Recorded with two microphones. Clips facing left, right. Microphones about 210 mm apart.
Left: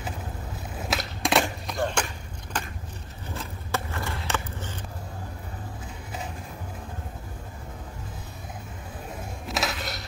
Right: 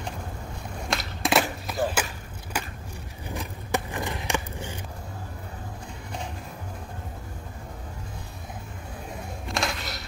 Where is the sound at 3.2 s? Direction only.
15° right (ahead or behind).